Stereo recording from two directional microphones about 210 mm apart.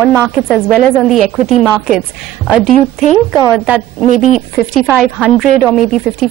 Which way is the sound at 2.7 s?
35° left (ahead or behind).